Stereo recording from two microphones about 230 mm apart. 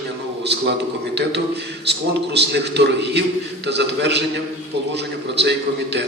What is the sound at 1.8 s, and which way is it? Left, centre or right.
A man's voice, right.